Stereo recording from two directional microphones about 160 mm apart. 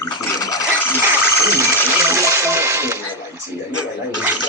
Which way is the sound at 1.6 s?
20° right (ahead or behind).